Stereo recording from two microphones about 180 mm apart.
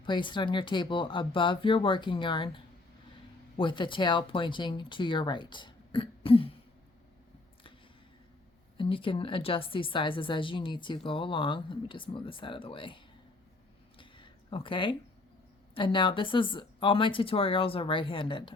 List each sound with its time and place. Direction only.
0.0 s a woman's voice: 25° left (ahead or behind)
3.6 s a woman's voice: 25° left (ahead or behind)
8.8 s a woman's voice: 30° left (ahead or behind)
14.0 s a sound: 30° left (ahead or behind)
15.7 s a woman's voice: 25° left (ahead or behind)